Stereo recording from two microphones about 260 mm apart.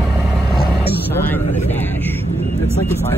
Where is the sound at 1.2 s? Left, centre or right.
Centre.